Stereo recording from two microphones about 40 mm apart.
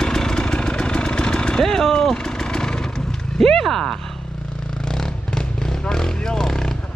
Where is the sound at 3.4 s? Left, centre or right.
Centre.